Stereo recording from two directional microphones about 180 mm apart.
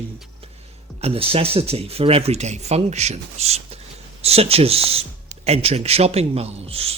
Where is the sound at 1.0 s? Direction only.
30° right (ahead or behind).